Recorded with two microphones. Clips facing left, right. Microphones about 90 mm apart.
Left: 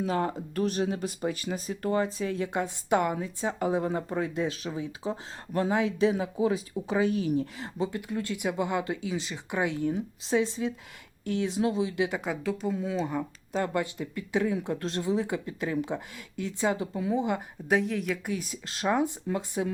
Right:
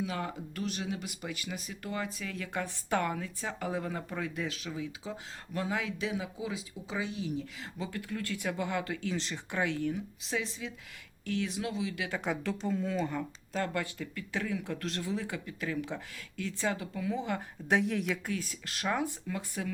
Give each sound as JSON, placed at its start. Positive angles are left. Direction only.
{"t": 0.0, "sound": "speech", "side_deg": 40}
{"t": 6.3, "sound": "speech", "side_deg": 50}
{"t": 7.6, "sound": "speech", "side_deg": 25}
{"t": 9.0, "sound": "speech", "side_deg": 10}
{"t": 9.9, "sound": "speech", "side_deg": 30}
{"t": 12.2, "sound": "speech", "side_deg": 5}
{"t": 17.7, "sound": "speech", "side_deg": 0}
{"t": 18.3, "sound": "speech", "side_deg": 20}